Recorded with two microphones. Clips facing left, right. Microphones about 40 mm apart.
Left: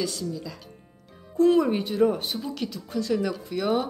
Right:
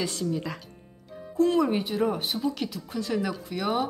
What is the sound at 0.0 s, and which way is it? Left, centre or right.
Speech, right.